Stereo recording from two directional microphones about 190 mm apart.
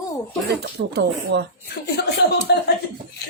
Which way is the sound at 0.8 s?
60° right (ahead or behind).